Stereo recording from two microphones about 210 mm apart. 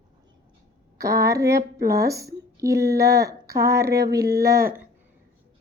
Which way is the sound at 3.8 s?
50° right (ahead or behind).